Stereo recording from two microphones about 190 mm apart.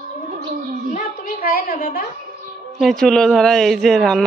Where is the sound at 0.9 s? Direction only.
45° left (ahead or behind).